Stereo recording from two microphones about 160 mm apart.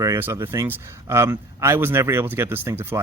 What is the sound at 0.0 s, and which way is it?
Speech, 15° right (ahead or behind).